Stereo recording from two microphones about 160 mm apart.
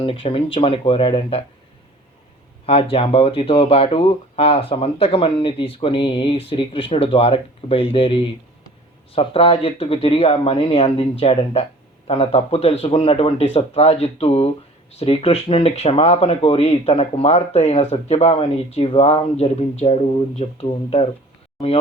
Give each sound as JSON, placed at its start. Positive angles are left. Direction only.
{"t": 0.0, "sound": "speech", "side_deg": 35}
{"t": 2.6, "sound": "speech", "side_deg": 35}